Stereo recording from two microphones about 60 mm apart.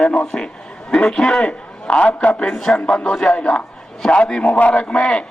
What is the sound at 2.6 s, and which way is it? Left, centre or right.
A man's voice, centre.